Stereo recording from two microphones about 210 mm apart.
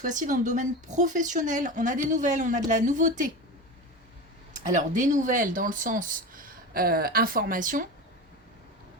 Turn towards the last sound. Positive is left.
turn(degrees=-40)  # may be behind; listen again after turning